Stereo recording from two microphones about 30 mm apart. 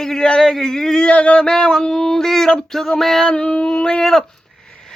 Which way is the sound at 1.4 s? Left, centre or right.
Left.